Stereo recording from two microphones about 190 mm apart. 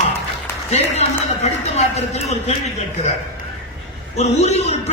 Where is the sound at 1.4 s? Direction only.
35° left (ahead or behind).